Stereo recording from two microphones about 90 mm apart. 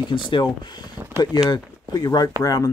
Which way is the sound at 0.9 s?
25° right (ahead or behind).